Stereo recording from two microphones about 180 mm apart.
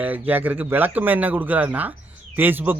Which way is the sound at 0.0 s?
10° right (ahead or behind).